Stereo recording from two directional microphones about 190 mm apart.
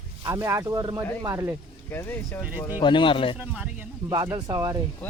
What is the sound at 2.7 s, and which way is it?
Speech, 25° left (ahead or behind).